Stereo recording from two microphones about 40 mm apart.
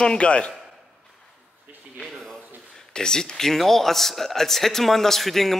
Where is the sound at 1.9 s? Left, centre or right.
Centre.